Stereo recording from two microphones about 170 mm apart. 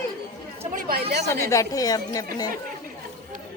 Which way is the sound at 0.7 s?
65° right (ahead or behind).